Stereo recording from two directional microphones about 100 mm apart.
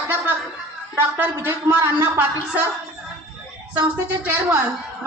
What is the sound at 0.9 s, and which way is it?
A man's voice, 25° right (ahead or behind).